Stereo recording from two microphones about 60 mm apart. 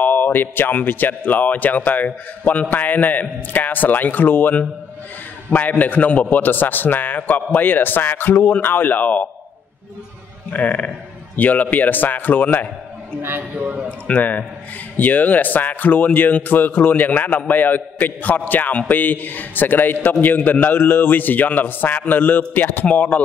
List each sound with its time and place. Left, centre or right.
0.0 s a man's voice: left
10.5 s a man's voice: left
13.2 s a man's voice: right
13.8 s a man's voice: left